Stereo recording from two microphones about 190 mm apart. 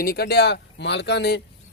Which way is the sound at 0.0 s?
55° left (ahead or behind).